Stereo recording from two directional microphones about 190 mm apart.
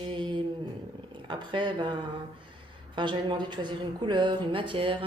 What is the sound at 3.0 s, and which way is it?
Speech, 25° right (ahead or behind).